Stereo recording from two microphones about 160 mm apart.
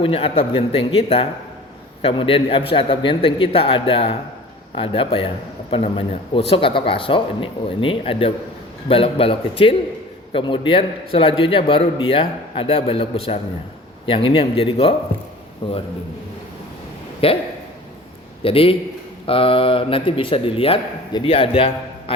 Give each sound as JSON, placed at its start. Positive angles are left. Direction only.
{"t": 0.0, "sound": "a man's voice", "side_deg": 35}
{"t": 17.2, "sound": "a man's voice", "side_deg": 35}
{"t": 18.4, "sound": "a man's voice", "side_deg": 35}